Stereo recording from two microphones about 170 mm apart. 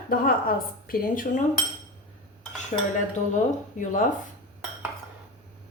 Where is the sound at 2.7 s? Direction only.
40° left (ahead or behind).